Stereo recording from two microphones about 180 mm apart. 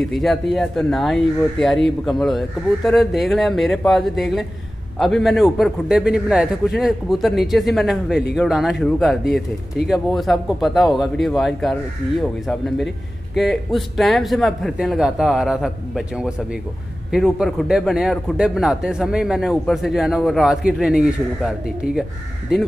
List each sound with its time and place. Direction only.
0.1 s a man's voice: centre (ahead or behind)